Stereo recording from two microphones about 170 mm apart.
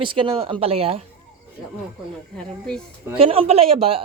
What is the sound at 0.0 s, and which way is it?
A man's voice, 30° right (ahead or behind).